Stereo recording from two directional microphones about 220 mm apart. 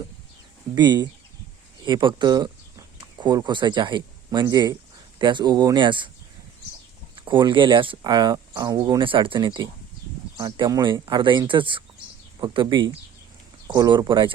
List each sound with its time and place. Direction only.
0.8 s speech: 20° right (ahead or behind)
7.2 s speech: 20° right (ahead or behind)